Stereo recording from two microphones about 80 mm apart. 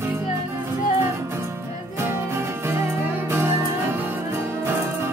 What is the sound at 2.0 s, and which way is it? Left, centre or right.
Music, right.